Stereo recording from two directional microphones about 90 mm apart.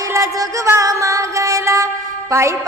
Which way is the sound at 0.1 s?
35° right (ahead or behind).